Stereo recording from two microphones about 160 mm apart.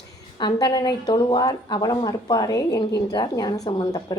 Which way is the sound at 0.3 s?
25° left (ahead or behind).